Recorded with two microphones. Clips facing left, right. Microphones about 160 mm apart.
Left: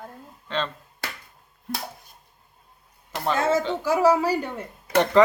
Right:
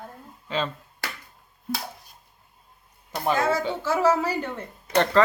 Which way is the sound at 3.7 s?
15° left (ahead or behind).